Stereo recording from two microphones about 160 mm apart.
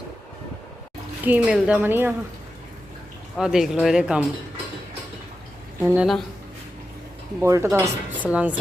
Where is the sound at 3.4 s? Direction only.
5° right (ahead or behind).